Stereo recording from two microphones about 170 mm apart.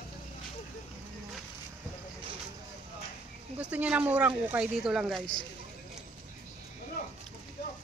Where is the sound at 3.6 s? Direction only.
5° right (ahead or behind).